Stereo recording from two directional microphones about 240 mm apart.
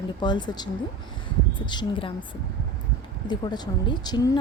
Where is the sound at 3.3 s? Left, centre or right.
Centre.